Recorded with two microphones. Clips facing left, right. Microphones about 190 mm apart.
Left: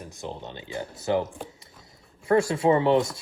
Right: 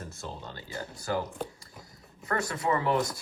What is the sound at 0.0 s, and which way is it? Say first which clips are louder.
Speech: left 4 dB; 15° left (ahead or behind).